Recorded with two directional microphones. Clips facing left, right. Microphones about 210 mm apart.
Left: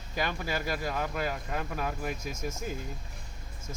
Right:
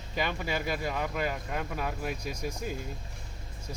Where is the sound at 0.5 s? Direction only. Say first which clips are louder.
Right 1 dB; 5° left (ahead or behind).